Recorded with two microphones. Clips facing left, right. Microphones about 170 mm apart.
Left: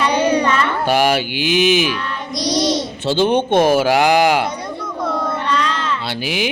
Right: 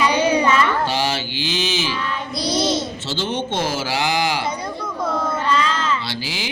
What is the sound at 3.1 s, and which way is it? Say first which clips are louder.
Speech: left 11 dB; 55° left (ahead or behind).